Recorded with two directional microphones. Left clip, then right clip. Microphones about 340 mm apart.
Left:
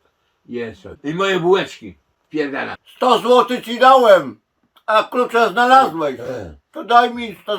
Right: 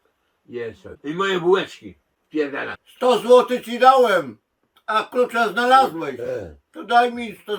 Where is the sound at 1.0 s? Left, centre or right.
Left.